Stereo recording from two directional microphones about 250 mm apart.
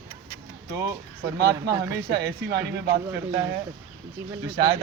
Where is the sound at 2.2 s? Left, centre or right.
Right.